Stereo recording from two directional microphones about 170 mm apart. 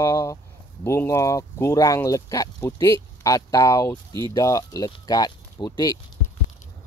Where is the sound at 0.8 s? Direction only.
15° left (ahead or behind).